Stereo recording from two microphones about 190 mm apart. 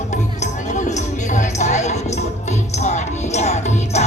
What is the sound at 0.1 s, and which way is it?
Music, 40° left (ahead or behind).